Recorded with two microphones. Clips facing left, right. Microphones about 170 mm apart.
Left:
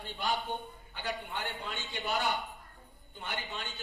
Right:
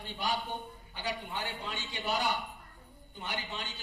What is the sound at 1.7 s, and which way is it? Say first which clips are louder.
A man's voice: even; 50° left (ahead or behind).